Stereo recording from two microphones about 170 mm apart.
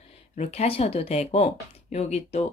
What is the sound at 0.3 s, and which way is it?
Speech, 40° left (ahead or behind).